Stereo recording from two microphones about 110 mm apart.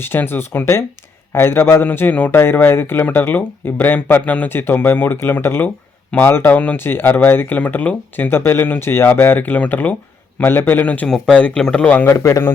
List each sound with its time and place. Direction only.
0.0 s speech: 20° left (ahead or behind)
12.1 s speech: 30° left (ahead or behind)